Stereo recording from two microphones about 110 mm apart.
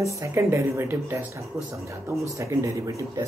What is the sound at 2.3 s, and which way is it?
Speech, 30° right (ahead or behind).